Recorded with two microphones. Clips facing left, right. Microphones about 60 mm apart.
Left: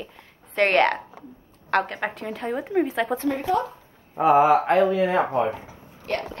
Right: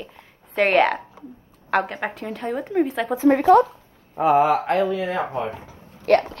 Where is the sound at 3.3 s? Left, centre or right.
Right.